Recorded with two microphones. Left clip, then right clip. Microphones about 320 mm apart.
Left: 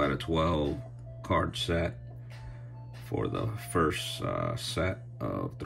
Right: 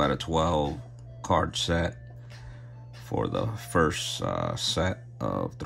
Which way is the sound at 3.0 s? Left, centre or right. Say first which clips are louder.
Right 4 dB; centre.